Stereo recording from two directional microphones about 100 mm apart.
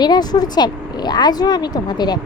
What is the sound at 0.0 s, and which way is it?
A woman's voice, 45° left (ahead or behind).